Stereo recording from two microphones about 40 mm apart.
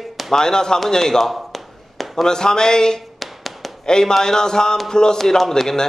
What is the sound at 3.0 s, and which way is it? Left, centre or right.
Music, centre.